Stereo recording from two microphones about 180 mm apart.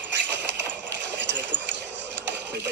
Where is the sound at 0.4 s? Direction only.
75° right (ahead or behind).